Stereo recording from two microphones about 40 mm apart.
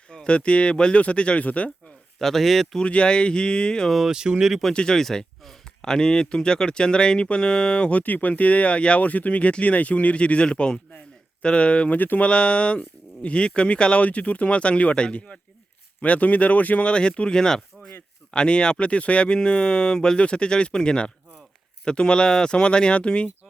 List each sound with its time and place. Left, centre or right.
0.1 s speech: left
2.1 s speech: centre
2.8 s speech: left
4.1 s speech: centre
4.7 s speech: left
4.9 s speech: centre; by 8.0 s left
8.0 s speech: left
9.0 s speech: left
11.9 s speech: left
12.2 s speech: left
14.0 s speech: left
16.9 s speech: left